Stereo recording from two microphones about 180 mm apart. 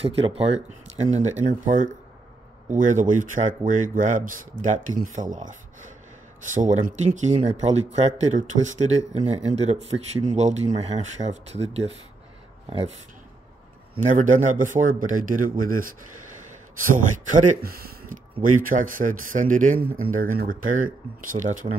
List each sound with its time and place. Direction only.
0.0 s speech: 35° right (ahead or behind)
14.0 s speech: 45° right (ahead or behind)
16.9 s speech: 45° right (ahead or behind)